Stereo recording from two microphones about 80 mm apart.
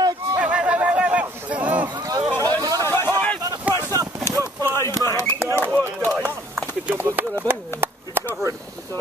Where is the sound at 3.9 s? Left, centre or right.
Right.